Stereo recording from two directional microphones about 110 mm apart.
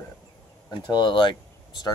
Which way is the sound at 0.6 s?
40° left (ahead or behind).